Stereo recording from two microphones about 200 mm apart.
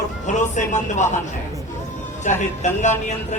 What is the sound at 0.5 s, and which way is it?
Speech, 35° left (ahead or behind).